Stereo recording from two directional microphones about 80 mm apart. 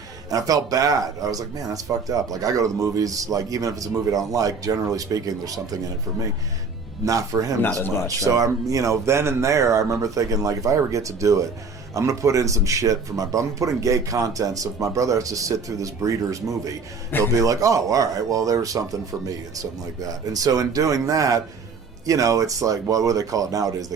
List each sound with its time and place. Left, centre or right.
0.3 s speech: right
7.0 s speech: right
20.1 s speech: right